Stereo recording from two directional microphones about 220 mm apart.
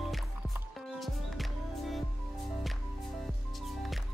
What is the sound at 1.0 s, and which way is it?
Music, centre (ahead or behind).